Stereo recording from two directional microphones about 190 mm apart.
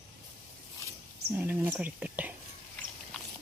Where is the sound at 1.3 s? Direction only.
10° right (ahead or behind).